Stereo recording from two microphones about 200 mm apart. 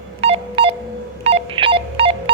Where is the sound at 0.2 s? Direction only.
30° right (ahead or behind).